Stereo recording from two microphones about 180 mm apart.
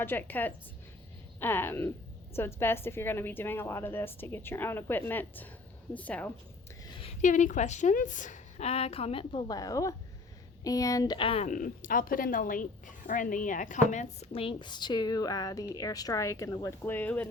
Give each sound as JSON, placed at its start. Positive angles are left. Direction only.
{"t": 0.0, "sound": "a woman's voice", "side_deg": 10}
{"t": 7.2, "sound": "a woman's voice", "side_deg": 45}
{"t": 11.4, "sound": "a woman's voice", "side_deg": 50}